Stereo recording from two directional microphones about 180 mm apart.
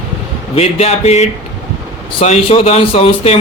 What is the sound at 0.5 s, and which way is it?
A man's voice, 35° left (ahead or behind).